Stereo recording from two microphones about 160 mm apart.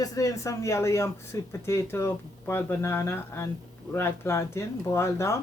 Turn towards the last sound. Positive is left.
turn(degrees=15)  # may be behind; listen again after turning